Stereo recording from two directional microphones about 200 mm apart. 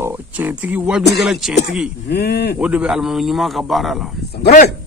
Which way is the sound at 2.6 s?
5° right (ahead or behind).